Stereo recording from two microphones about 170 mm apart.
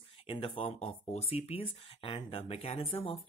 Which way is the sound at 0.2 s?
30° left (ahead or behind).